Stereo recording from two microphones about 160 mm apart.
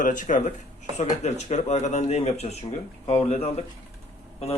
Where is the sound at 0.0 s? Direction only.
55° left (ahead or behind).